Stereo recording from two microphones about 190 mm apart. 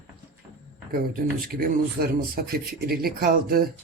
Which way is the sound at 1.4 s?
50° right (ahead or behind).